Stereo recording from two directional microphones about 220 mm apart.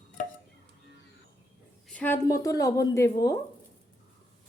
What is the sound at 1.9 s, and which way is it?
Speech, 5° left (ahead or behind).